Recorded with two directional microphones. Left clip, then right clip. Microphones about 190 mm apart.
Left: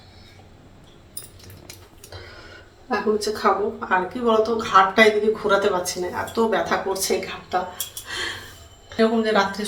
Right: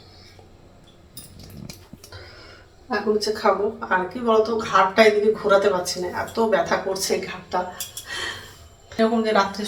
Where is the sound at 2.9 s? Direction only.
Centre (ahead or behind).